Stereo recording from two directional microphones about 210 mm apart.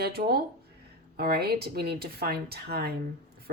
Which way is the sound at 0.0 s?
50° right (ahead or behind).